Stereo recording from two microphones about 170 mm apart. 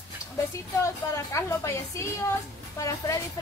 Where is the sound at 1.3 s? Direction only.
15° left (ahead or behind).